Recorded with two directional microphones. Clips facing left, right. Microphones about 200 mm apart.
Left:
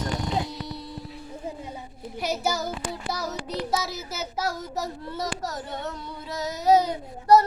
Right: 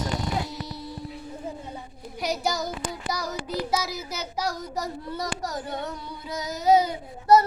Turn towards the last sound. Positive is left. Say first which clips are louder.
# even
turn(degrees=0)  # may be behind; listen again after turning